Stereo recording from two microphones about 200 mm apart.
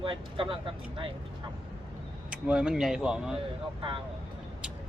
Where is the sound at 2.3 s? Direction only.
5° right (ahead or behind).